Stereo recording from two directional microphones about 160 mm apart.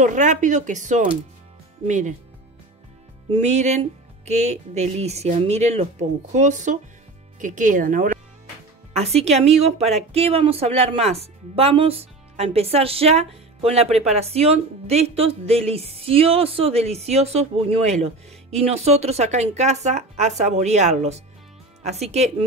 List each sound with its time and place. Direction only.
0.0 s speech: 50° right (ahead or behind)
3.3 s speech: 45° right (ahead or behind)
8.9 s speech: 40° right (ahead or behind)